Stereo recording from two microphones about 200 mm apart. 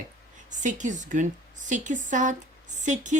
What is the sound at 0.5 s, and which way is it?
A woman's voice, 40° right (ahead or behind).